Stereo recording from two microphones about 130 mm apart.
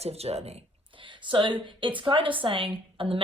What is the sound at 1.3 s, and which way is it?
A woman's voice, 40° right (ahead or behind).